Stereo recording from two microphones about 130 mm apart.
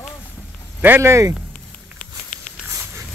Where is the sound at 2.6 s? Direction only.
20° right (ahead or behind).